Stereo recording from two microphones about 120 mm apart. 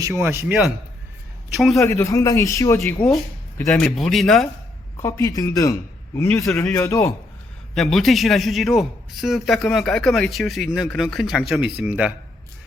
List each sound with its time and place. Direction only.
0.0 s a man's voice: 20° right (ahead or behind)
1.5 s a man's voice: centre (ahead or behind)
1.8 s a man's voice: 25° left (ahead or behind)
3.6 s a man's voice: centre (ahead or behind)
5.0 s a man's voice: 25° left (ahead or behind)
7.8 s a man's voice: centre (ahead or behind)